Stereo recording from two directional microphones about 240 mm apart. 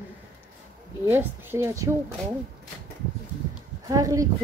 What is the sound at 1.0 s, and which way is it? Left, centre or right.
Speech, centre.